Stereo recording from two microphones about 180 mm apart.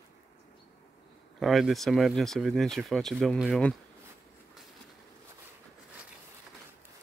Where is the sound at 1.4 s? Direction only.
Centre (ahead or behind).